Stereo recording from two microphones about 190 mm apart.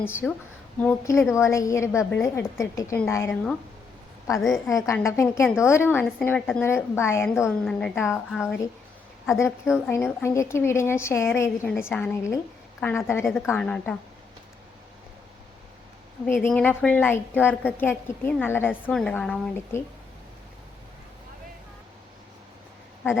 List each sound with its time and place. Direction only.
0.0 s a woman's voice: 10° left (ahead or behind)
4.4 s a woman's voice: centre (ahead or behind)
4.9 s a woman's voice: 15° left (ahead or behind)
7.3 s a woman's voice: centre (ahead or behind)
9.6 s a woman's voice: centre (ahead or behind)
9.9 s a woman's voice: 10° left (ahead or behind)
13.2 s a woman's voice: centre (ahead or behind)
16.2 s a woman's voice: 10° left (ahead or behind)